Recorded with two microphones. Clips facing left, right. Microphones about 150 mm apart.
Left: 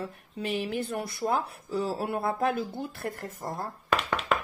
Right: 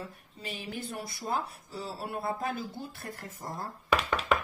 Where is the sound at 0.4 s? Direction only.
60° left (ahead or behind).